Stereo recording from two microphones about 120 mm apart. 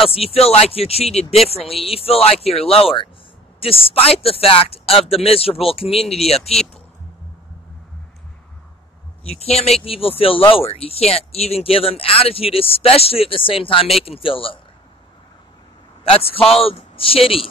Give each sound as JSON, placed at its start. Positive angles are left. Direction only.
{"t": 0.0, "sound": "speech", "side_deg": 55}
{"t": 9.2, "sound": "speech", "side_deg": 60}
{"t": 16.0, "sound": "speech", "side_deg": 50}